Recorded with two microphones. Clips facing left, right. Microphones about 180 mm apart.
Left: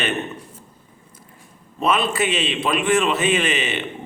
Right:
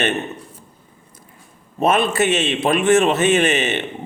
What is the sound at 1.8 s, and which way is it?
A man's voice, 50° right (ahead or behind).